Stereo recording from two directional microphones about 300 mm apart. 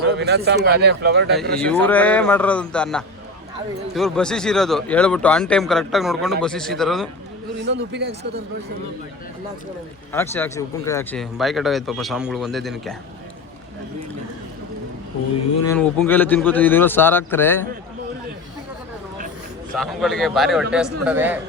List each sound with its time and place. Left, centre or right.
0.1 s speech: right
1.5 s speech: centre
7.8 s speech: right
10.1 s speech: centre
15.6 s speech: centre
19.7 s speech: centre